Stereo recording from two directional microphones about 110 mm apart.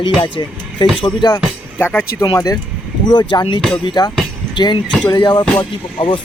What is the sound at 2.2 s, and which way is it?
Speech, 35° left (ahead or behind).